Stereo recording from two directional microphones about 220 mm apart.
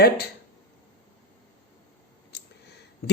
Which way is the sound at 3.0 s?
45° left (ahead or behind).